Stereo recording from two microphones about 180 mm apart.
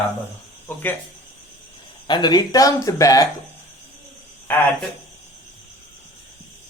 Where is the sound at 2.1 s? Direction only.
25° left (ahead or behind).